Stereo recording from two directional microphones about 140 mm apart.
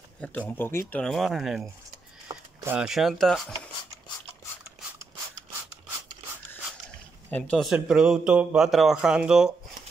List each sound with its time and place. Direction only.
0.2 s speech: 10° left (ahead or behind)
1.0 s speech: centre (ahead or behind)
2.2 s a sound: 15° right (ahead or behind)
2.8 s speech: centre (ahead or behind)
7.2 s speech: 10° left (ahead or behind)
7.5 s speech: 5° right (ahead or behind)